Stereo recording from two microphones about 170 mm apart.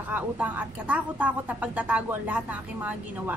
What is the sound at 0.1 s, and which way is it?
A woman's voice, 10° right (ahead or behind).